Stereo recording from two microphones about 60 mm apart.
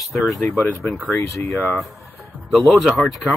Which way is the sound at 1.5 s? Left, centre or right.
Centre.